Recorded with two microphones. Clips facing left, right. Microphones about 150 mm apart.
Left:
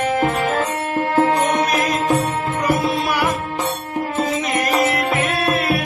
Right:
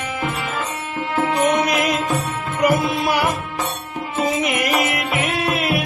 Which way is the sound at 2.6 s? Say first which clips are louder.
Right 3 dB; 20° right (ahead or behind).